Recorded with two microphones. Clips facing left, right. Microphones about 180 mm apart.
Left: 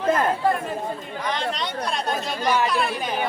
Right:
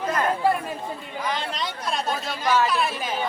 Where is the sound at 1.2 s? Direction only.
Centre (ahead or behind).